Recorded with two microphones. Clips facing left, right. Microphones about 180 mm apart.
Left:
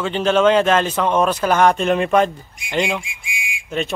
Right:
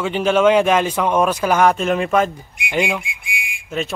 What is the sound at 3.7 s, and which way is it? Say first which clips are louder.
Speech: left 1 dB; centre (ahead or behind).